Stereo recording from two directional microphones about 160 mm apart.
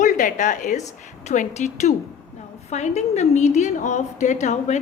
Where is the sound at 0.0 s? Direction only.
55° left (ahead or behind).